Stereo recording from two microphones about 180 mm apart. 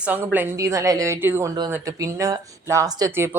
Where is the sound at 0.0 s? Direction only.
10° right (ahead or behind).